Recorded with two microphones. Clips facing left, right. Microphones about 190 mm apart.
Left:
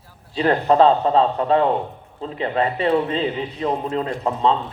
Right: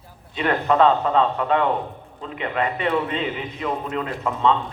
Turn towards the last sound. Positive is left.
turn(degrees=35)  # may be behind; listen again after turning